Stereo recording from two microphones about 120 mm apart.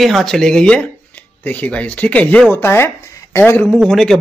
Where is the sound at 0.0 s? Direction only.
Centre (ahead or behind); by 3.6 s 20° left (ahead or behind).